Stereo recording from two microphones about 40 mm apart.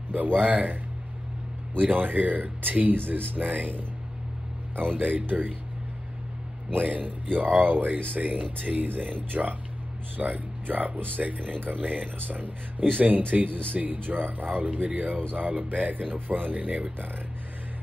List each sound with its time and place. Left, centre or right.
0.1 s speech: right
1.8 s speech: right
6.7 s speech: right